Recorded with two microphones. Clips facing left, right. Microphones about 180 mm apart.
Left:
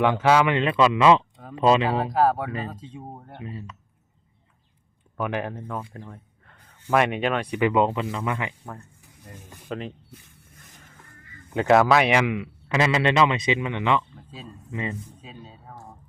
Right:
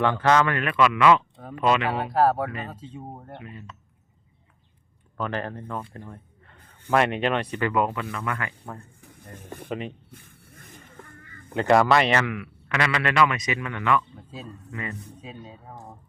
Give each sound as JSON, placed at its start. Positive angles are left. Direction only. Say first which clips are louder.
{"t": 0.0, "sound": "speech", "louder": "left 2 dB", "side_deg": 15}
{"t": 0.5, "sound": "a man's voice", "louder": "left 2 dB", "side_deg": 25}
{"t": 2.1, "sound": "speech", "louder": "right 3 dB", "side_deg": -5}
{"t": 3.4, "sound": "speech", "louder": "left 5 dB", "side_deg": 30}
{"t": 5.1, "sound": "speech", "louder": "left 2 dB", "side_deg": 10}
{"t": 6.0, "sound": "a sound", "louder": "even", "side_deg": 0}
{"t": 6.9, "sound": "speech", "louder": "even", "side_deg": 5}
{"t": 7.5, "sound": "a man's voice", "louder": "left 4 dB", "side_deg": 20}
{"t": 9.0, "sound": "a sound", "louder": "right 2 dB", "side_deg": -55}
{"t": 9.6, "sound": "speech", "louder": "even", "side_deg": -5}
{"t": 10.1, "sound": "a sound", "louder": "right 1 dB", "side_deg": -55}
{"t": 11.7, "sound": "speech", "louder": "left 1 dB", "side_deg": 0}
{"t": 12.0, "sound": "a man's voice", "louder": "left 2 dB", "side_deg": 15}
{"t": 15.7, "sound": "speech", "louder": "left 1 dB", "side_deg": -20}